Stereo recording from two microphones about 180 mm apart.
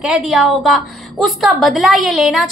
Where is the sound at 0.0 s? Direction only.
5° right (ahead or behind).